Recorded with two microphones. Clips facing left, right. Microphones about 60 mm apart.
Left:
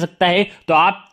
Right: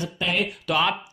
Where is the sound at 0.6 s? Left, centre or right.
Left.